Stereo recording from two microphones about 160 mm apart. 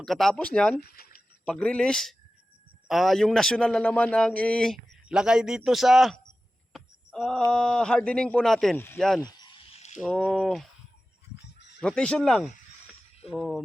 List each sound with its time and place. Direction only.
0.0 s a man's voice: centre (ahead or behind)
0.8 s speech: 70° left (ahead or behind)
1.5 s a man's voice: 5° left (ahead or behind)
6.7 s a sound: centre (ahead or behind)
7.5 s a man's voice: 5° left (ahead or behind)
8.7 s speech: 15° left (ahead or behind)
9.0 s a man's voice: centre (ahead or behind)
9.2 s a sound: 30° left (ahead or behind)
10.0 s a man's voice: centre (ahead or behind)
11.8 s a man's voice: 5° left (ahead or behind)